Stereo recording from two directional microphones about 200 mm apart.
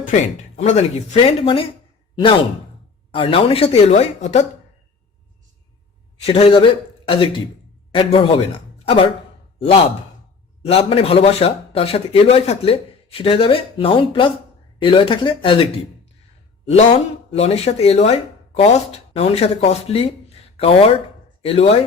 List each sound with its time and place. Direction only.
0.1 s speech: 35° left (ahead or behind)
3.1 s speech: 25° left (ahead or behind)
6.2 s speech: 25° left (ahead or behind)
8.8 s a sound: 30° left (ahead or behind)
9.6 s a man's voice: 25° left (ahead or behind)
17.3 s speech: 30° left (ahead or behind)